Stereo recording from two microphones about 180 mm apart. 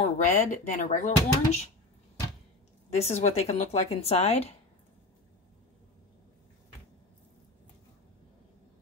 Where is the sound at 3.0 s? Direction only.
35° left (ahead or behind).